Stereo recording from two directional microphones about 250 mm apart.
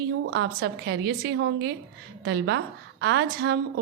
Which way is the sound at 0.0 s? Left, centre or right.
Right.